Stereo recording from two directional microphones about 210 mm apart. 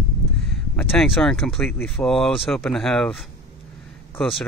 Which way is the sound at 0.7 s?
5° left (ahead or behind).